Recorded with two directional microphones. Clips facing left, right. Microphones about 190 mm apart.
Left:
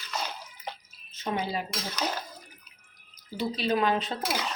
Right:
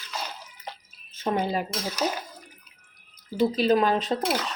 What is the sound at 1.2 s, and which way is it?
Speech, 45° right (ahead or behind).